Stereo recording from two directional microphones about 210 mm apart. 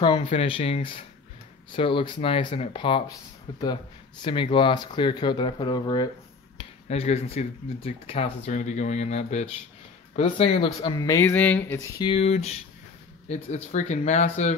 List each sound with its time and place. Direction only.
0.0 s speech: 25° left (ahead or behind)
10.8 s speech: 20° left (ahead or behind)
12.1 s speech: 30° left (ahead or behind)